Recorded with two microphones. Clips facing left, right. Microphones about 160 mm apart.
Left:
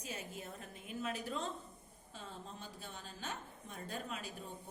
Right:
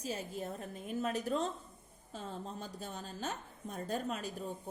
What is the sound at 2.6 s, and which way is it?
A woman's voice, 45° right (ahead or behind).